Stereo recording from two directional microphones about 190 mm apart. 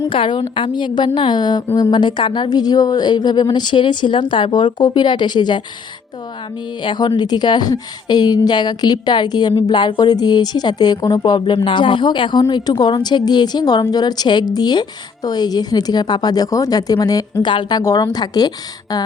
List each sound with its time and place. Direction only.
0.1 s a woman's voice: 25° left (ahead or behind)
6.8 s a woman's voice: 25° left (ahead or behind)